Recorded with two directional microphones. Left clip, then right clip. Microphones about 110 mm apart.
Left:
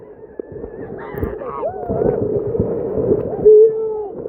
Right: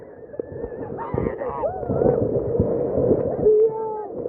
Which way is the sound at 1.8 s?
35° left (ahead or behind).